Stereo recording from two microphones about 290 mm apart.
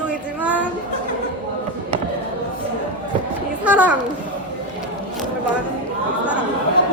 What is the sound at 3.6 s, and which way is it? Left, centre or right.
Speech, centre.